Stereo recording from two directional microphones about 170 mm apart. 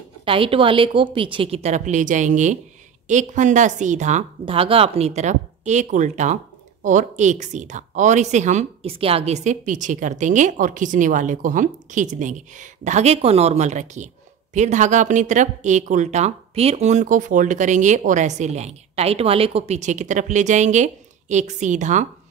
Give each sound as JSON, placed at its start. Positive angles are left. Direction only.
{"t": 0.2, "sound": "a woman's voice", "side_deg": -30}
{"t": 4.5, "sound": "speech", "side_deg": -35}